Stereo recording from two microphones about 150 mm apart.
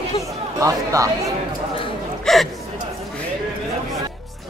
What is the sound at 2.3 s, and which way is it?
Speech, centre (ahead or behind).